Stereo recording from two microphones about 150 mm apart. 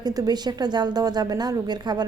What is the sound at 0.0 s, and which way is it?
A woman's voice, 25° right (ahead or behind).